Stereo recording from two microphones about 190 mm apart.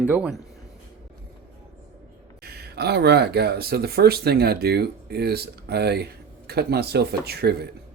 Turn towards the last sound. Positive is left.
turn(degrees=-55)  # may be behind; listen again after turning